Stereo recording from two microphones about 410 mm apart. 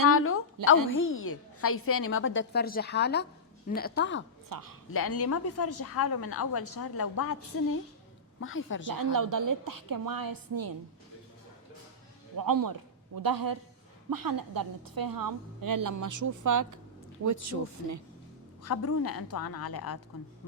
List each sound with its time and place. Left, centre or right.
0.1 s a sound: left
0.9 s a woman's voice: left
4.4 s speech: right
4.9 s a woman's voice: left
8.9 s a woman's voice: right
12.4 s a woman's voice: right
18.8 s speech: left
19.4 s speech: left